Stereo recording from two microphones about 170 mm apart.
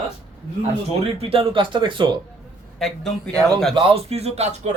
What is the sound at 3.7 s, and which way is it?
Speech, 35° right (ahead or behind).